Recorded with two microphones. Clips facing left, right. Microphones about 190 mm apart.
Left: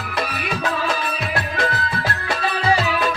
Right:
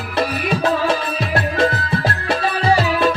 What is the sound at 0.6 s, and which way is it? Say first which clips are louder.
Music: right 4 dB; 35° right (ahead or behind).